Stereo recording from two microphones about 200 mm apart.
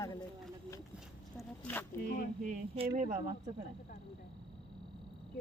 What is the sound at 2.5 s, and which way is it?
Speech, 30° right (ahead or behind).